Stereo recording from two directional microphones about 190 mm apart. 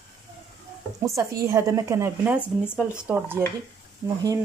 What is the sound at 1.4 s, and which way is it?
Speech, 15° right (ahead or behind).